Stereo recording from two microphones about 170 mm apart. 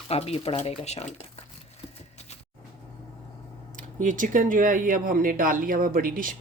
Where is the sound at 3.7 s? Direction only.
50° right (ahead or behind).